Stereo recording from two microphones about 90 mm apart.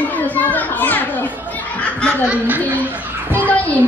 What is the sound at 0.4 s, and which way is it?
Children playing, 20° left (ahead or behind).